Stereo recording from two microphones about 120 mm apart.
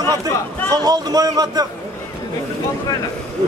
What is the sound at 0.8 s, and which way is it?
Speech, 30° right (ahead or behind).